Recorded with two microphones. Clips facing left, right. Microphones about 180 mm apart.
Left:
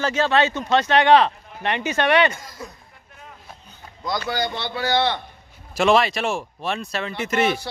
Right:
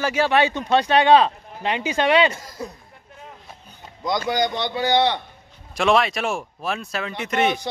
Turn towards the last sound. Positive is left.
turn(degrees=0)  # may be behind; listen again after turning